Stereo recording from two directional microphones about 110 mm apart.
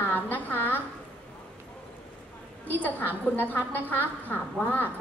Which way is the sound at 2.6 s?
15° left (ahead or behind).